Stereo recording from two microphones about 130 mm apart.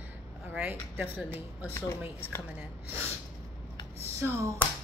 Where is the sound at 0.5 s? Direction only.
15° right (ahead or behind).